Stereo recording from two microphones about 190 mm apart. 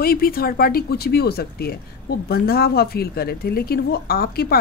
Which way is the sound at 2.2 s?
55° left (ahead or behind).